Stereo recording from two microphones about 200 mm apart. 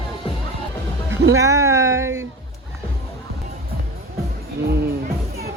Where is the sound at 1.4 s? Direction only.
15° right (ahead or behind).